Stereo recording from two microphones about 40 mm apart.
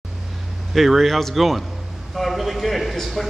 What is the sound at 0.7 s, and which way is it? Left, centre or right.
A man's voice, centre.